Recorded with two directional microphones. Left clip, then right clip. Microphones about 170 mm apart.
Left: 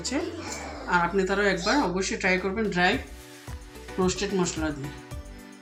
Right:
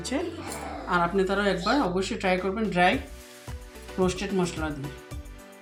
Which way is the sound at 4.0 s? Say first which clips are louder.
Even; 55° right (ahead or behind).